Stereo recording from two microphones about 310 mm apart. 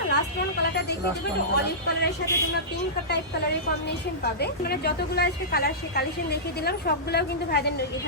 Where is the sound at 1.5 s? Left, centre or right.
Left.